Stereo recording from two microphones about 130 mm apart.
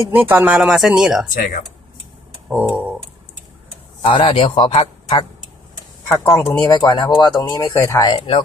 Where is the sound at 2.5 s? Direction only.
10° right (ahead or behind).